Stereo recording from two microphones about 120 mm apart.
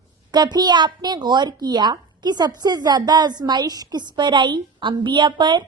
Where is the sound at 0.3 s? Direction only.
35° right (ahead or behind).